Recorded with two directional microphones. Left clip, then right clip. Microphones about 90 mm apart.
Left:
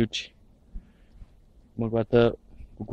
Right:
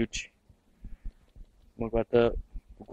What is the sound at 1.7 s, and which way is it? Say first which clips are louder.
Speech: left 3 dB; 20° left (ahead or behind).